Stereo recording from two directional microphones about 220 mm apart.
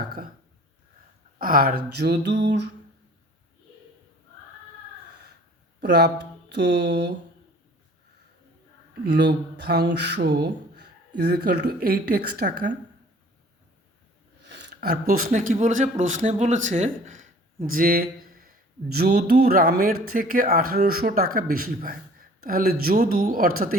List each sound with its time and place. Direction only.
1.4 s speech: 40° right (ahead or behind)
5.8 s speech: 50° right (ahead or behind)
9.0 s speech: 50° right (ahead or behind)
14.4 s speech: 55° right (ahead or behind); by 16.6 s 35° right (ahead or behind)
16.6 s a sound: 35° right (ahead or behind)
17.7 s speech: 40° right (ahead or behind)